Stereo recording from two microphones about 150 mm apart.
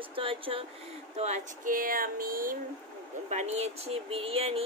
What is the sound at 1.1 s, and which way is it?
Speech, 50° right (ahead or behind).